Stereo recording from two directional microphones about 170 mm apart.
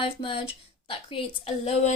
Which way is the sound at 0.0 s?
30° left (ahead or behind).